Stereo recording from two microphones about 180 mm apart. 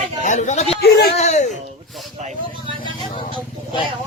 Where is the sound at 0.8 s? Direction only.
60° left (ahead or behind).